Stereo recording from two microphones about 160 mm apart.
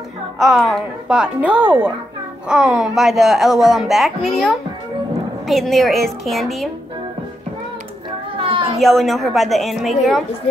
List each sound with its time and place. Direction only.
0.4 s speech: centre (ahead or behind)
5.5 s speech: centre (ahead or behind)
8.4 s children playing: 35° right (ahead or behind)
8.7 s speech: centre (ahead or behind)